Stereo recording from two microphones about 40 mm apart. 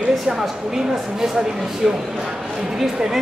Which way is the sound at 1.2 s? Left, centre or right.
Centre.